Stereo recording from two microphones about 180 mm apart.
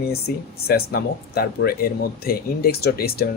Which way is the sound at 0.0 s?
60° left (ahead or behind).